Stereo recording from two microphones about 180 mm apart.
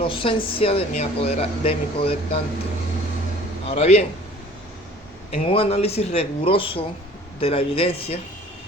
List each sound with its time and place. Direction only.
0.0 s a woman's voice: 30° left (ahead or behind)
3.7 s a woman's voice: 35° left (ahead or behind)
5.3 s a woman's voice: 35° left (ahead or behind)